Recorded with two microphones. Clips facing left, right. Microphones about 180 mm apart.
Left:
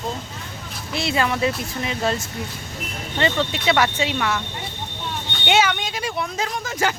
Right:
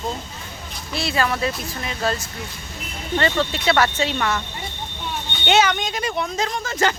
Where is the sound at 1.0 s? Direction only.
20° left (ahead or behind).